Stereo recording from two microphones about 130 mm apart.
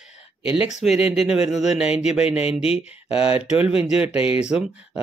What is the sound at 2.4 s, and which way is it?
Speech, 45° left (ahead or behind).